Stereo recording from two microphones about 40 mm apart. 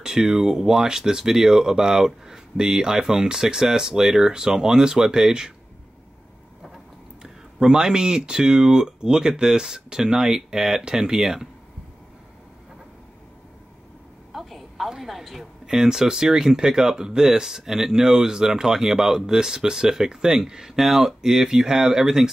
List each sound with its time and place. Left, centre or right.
0.0 s speech: centre
7.5 s speech: centre
14.3 s a sound: centre
15.6 s speech: centre